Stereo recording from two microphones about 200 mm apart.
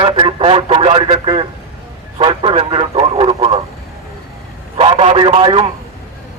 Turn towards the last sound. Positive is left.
turn(degrees=-25)  # may be behind; listen again after turning